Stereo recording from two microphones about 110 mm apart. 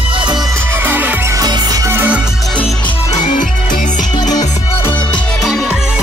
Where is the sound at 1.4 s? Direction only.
35° right (ahead or behind).